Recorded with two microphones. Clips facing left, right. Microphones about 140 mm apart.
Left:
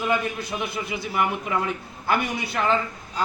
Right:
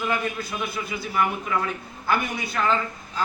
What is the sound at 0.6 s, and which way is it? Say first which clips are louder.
Speech: left 1 dB; 25° left (ahead or behind).